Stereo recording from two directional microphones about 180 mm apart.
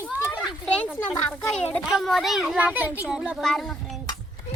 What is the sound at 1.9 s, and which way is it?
A child's voice, centre (ahead or behind).